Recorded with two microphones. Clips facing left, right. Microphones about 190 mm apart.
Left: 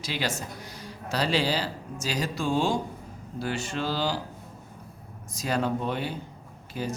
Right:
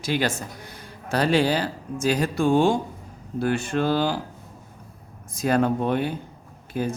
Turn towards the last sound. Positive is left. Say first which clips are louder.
# right 6 dB
turn(degrees=-50)  # may be behind; listen again after turning